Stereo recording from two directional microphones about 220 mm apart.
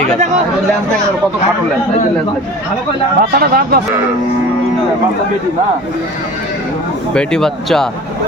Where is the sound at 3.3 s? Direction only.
45° right (ahead or behind).